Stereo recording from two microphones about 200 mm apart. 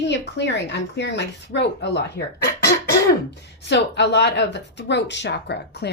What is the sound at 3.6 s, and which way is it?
Speech, 60° left (ahead or behind).